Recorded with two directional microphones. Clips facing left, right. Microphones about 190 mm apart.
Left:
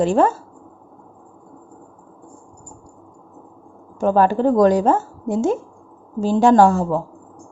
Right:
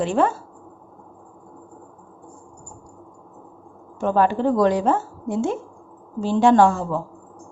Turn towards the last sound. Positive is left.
turn(degrees=40)  # may be behind; listen again after turning